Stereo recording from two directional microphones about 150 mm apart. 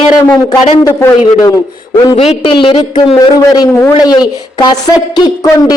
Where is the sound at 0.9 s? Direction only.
20° left (ahead or behind).